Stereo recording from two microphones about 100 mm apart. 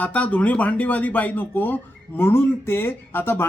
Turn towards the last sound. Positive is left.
turn(degrees=20)  # may be behind; listen again after turning